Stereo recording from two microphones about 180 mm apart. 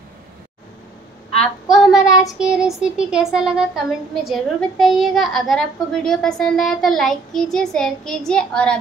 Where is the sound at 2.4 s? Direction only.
5° right (ahead or behind).